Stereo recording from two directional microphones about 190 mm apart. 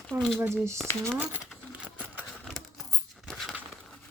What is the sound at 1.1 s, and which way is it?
Sewing machine, 5° left (ahead or behind).